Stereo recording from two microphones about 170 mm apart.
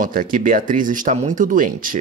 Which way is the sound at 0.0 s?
55° right (ahead or behind).